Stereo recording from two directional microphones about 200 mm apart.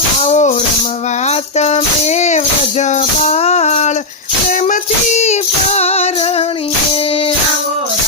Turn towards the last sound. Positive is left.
turn(degrees=30)  # may be behind; listen again after turning